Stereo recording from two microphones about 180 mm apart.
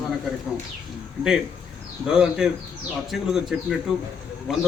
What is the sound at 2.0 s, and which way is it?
A man's voice, 5° right (ahead or behind).